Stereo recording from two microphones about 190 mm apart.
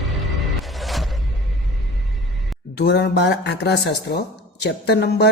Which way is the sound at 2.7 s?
60° left (ahead or behind).